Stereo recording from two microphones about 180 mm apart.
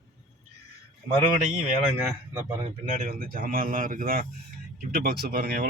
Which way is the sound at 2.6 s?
40° right (ahead or behind).